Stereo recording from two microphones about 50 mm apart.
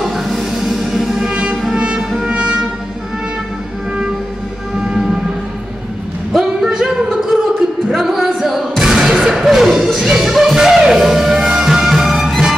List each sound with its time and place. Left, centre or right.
0.0 s music: centre
1.3 s music: right
6.3 s singing: centre
6.7 s a sound: centre
7.9 s music: centre